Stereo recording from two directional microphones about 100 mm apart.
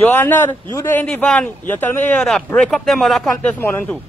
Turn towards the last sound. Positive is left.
turn(degrees=20)  # may be behind; listen again after turning